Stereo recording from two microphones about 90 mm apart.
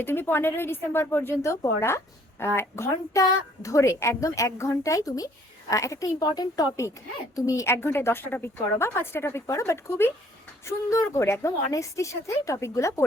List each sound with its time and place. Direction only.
0.0 s a woman's voice: 25° left (ahead or behind); by 6.7 s 50° left (ahead or behind)
7.3 s a woman's voice: 35° left (ahead or behind)